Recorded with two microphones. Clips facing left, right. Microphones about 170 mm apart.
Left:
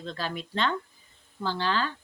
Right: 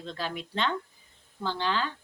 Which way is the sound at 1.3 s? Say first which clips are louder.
Left 1 dB; 15° right (ahead or behind).